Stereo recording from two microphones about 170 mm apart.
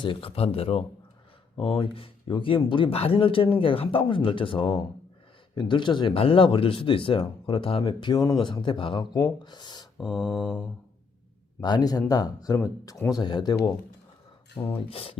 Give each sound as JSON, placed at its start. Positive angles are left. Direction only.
{"t": 0.0, "sound": "speech", "side_deg": 30}
{"t": 10.3, "sound": "mantra", "side_deg": 5}
{"t": 11.6, "sound": "speech", "side_deg": 25}
{"t": 14.8, "sound": "speech", "side_deg": 35}